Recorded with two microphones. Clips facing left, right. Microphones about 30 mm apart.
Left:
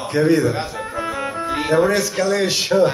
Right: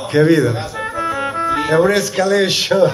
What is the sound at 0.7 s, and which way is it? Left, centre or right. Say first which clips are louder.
Music: right 4 dB; right.